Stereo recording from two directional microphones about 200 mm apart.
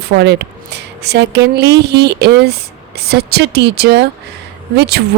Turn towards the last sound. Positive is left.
turn(degrees=-55)  # may be behind; listen again after turning